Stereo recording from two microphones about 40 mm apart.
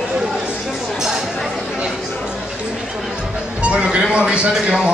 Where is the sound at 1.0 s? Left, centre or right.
Centre.